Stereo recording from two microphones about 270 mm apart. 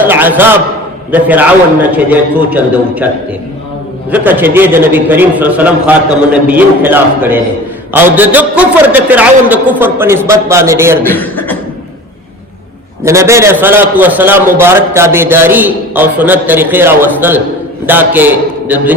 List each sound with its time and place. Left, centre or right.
0.0 s a man's voice: centre
4.1 s a man's voice: centre
11.1 s beatboxing: centre
13.1 s a man's voice: centre